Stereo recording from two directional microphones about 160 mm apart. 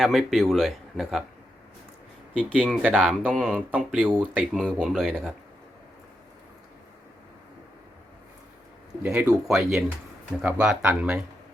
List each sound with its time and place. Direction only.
0.0 s speech: centre (ahead or behind)
2.4 s speech: 10° right (ahead or behind)
3.7 s speech: 10° right (ahead or behind)
4.5 s speech: centre (ahead or behind)
9.0 s speech: 5° right (ahead or behind)